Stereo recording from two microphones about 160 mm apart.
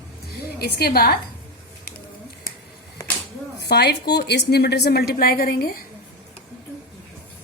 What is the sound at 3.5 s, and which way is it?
A woman's voice, 90° left.